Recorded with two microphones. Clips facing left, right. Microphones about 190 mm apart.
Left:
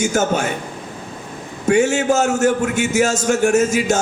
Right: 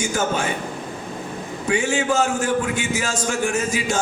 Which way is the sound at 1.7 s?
45° left (ahead or behind).